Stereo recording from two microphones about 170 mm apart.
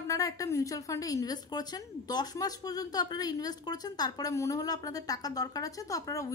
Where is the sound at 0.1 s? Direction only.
20° left (ahead or behind).